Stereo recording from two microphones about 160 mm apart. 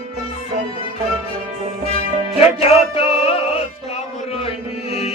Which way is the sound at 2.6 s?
35° left (ahead or behind).